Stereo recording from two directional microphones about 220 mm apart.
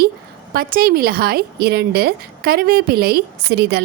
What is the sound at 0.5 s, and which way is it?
A woman's voice, 40° right (ahead or behind).